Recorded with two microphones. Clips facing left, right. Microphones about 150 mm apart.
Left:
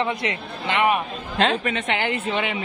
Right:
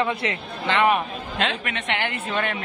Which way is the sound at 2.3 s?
15° left (ahead or behind).